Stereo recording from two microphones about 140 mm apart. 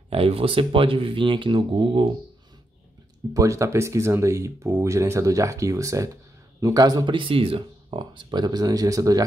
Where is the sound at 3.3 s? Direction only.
20° right (ahead or behind).